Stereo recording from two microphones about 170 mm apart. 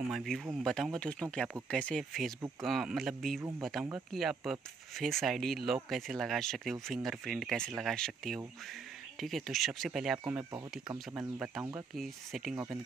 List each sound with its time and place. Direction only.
0.1 s speech: centre (ahead or behind)
3.3 s speech: 15° right (ahead or behind)
4.1 s speech: centre (ahead or behind)
11.9 s speech: centre (ahead or behind)